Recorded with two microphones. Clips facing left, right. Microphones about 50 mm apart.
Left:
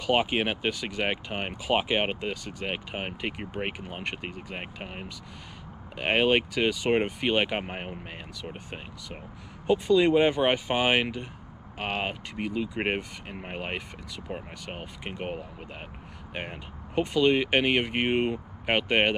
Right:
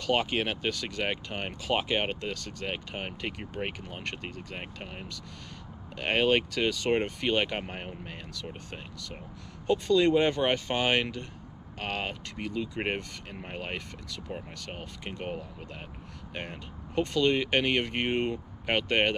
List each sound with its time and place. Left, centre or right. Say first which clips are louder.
0.0 s speech: left 3 dB; centre